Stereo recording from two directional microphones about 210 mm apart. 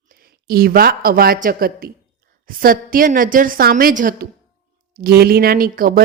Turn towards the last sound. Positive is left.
turn(degrees=-45)  # may be behind; listen again after turning